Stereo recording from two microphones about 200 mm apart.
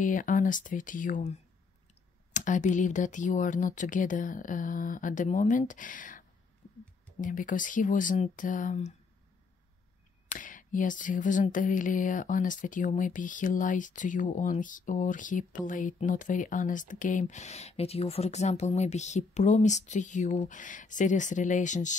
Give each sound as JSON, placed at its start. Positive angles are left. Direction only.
{"t": 0.0, "sound": "speech", "side_deg": 40}
{"t": 10.4, "sound": "speech", "side_deg": 40}